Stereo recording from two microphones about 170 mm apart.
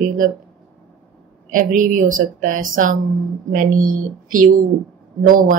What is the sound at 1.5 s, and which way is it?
Speech, 50° right (ahead or behind).